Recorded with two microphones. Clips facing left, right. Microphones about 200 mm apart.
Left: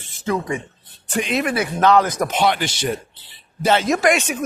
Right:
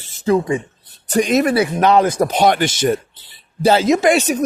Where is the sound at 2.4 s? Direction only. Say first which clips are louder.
Right 5 dB; 45° right (ahead or behind).